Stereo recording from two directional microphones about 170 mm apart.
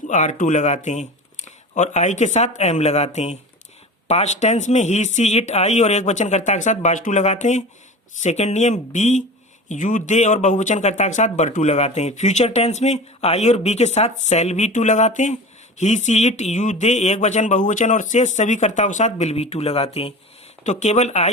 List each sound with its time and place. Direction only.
0.1 s speech: 45° left (ahead or behind)